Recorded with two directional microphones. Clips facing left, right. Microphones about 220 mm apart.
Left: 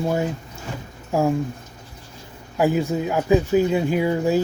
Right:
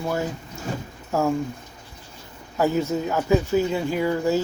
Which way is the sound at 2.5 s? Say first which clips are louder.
Left 2 dB; 15° left (ahead or behind).